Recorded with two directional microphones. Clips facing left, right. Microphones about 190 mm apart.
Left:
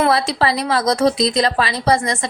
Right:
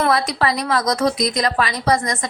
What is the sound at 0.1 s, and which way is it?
A woman's voice, 30° left (ahead or behind).